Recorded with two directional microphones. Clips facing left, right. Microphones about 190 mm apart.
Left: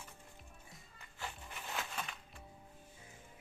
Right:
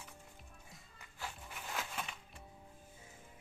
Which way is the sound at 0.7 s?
Centre (ahead or behind).